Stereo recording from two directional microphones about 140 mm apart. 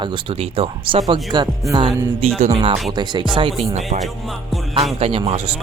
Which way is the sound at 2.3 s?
50° right (ahead or behind).